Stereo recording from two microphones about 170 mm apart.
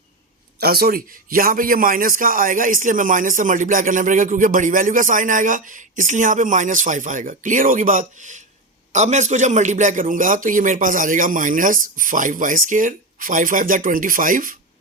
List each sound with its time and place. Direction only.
0.6 s a man's voice: 65° right (ahead or behind)